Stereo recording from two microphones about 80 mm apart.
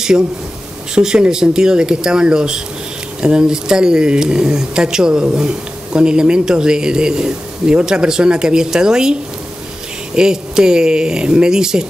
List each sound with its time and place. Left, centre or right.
0.9 s a man's voice: centre